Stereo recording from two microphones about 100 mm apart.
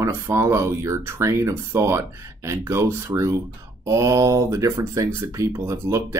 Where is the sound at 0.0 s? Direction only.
30° right (ahead or behind).